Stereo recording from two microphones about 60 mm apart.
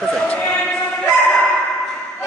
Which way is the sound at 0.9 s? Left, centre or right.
Centre.